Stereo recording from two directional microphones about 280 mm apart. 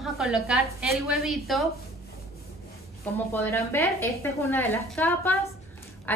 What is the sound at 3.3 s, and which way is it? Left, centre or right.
A woman's voice, centre.